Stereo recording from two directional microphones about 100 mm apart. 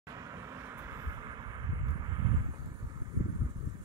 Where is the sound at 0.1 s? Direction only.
35° right (ahead or behind).